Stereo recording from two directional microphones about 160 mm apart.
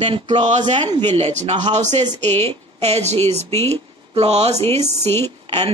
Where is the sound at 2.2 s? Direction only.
15° left (ahead or behind).